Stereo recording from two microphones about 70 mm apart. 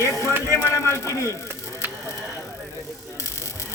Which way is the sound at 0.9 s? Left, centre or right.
Left.